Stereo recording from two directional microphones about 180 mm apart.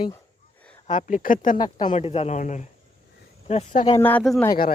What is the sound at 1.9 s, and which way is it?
Speech, 35° left (ahead or behind).